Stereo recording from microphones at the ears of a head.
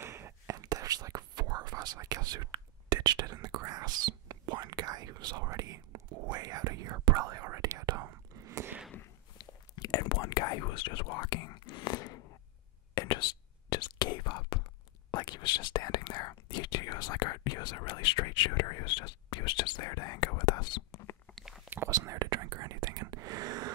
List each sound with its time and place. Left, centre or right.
0.0 s whispering: right
8.9 s whispering: left
21.7 s whispering: right